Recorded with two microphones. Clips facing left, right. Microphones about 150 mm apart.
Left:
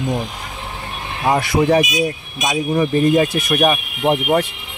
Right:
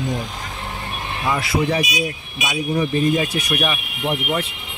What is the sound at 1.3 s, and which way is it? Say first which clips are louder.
Speech: left 6 dB; 45° left (ahead or behind).